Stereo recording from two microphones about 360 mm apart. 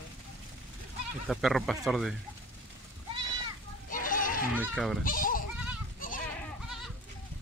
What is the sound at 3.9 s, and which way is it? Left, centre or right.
Goat, left.